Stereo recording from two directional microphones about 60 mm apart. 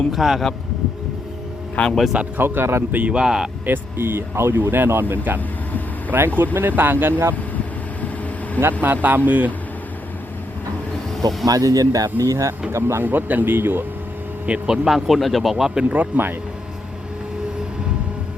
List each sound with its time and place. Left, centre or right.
0.1 s speech: centre
1.8 s speech: left
2.4 s speech: right
2.9 s speech: right
3.7 s speech: right
8.8 s speech: right
11.4 s speech: right
12.2 s speech: right
12.7 s speech: right
13.1 s speech: right
14.4 s speech: right
14.8 s speech: centre
15.9 s speech: right